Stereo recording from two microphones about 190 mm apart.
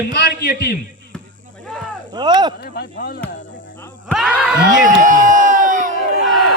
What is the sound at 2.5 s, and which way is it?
Speech, 55° left (ahead or behind).